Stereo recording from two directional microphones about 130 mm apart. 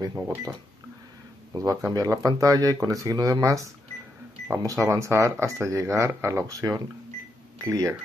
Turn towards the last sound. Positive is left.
turn(degrees=-25)  # may be behind; listen again after turning